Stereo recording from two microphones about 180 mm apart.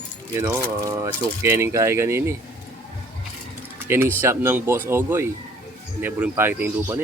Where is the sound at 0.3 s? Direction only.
15° right (ahead or behind).